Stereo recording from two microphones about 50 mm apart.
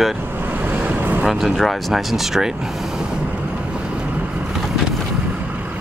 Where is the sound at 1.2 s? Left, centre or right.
Centre.